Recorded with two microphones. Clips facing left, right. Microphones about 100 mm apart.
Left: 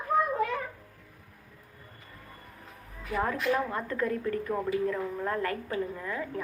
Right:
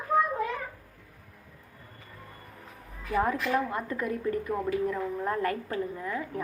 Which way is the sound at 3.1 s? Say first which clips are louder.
Right 2 dB; 20° right (ahead or behind).